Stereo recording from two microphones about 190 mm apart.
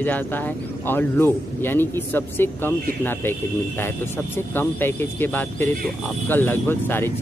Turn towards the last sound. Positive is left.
turn(degrees=10)  # may be behind; listen again after turning